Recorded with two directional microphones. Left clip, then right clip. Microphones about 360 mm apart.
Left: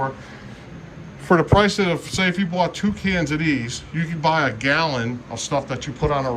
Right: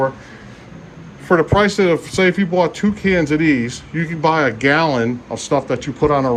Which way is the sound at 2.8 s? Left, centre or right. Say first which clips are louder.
Right 5 dB; centre.